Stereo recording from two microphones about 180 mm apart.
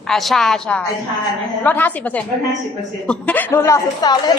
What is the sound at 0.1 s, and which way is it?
A woman's voice, centre (ahead or behind).